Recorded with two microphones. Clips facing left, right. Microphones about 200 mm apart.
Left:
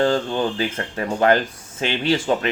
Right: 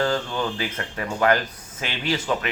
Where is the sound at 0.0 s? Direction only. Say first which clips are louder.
Left 5 dB; 25° left (ahead or behind).